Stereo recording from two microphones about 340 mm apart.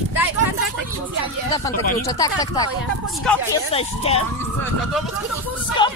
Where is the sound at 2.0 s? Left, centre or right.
Centre.